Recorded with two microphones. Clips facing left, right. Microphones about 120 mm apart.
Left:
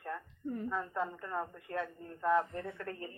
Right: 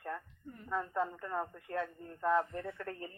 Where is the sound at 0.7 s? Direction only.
25° right (ahead or behind).